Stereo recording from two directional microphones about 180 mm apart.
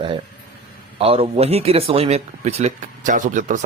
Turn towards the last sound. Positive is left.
turn(degrees=-45)  # may be behind; listen again after turning